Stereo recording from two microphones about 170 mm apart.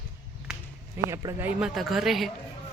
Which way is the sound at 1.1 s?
15° right (ahead or behind).